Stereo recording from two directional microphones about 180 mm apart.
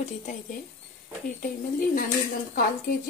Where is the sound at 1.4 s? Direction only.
50° left (ahead or behind).